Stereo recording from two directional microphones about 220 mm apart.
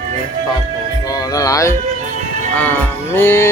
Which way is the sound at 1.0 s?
15° left (ahead or behind).